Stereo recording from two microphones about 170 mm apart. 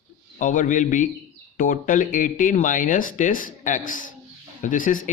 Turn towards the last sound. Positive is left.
turn(degrees=50)  # may be behind; listen again after turning